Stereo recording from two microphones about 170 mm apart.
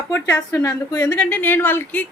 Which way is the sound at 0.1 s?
15° left (ahead or behind).